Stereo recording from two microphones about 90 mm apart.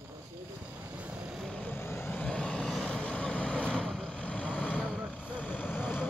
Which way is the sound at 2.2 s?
10° left (ahead or behind).